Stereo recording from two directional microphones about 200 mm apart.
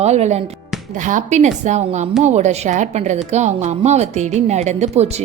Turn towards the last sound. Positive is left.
turn(degrees=-35)  # may be behind; listen again after turning